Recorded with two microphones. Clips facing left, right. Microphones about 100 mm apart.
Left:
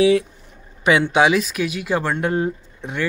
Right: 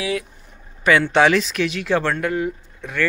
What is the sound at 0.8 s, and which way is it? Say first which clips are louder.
Speech: even; 20° left (ahead or behind).